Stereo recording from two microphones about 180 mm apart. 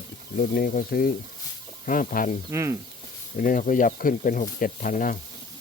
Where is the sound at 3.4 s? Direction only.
50° left (ahead or behind).